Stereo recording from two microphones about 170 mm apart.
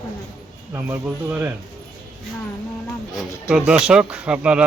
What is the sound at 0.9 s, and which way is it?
Speech, 10° right (ahead or behind).